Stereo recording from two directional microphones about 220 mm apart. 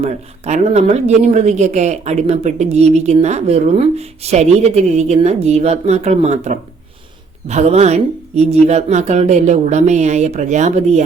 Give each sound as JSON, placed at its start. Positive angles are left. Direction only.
{"t": 0.0, "sound": "a woman's voice", "side_deg": -30}